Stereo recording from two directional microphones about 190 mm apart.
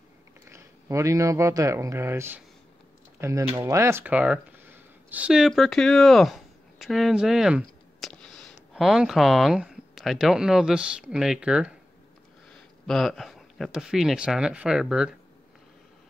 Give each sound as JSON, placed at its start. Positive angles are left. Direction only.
{"t": 0.5, "sound": "speech", "side_deg": -15}
{"t": 12.8, "sound": "speech", "side_deg": 0}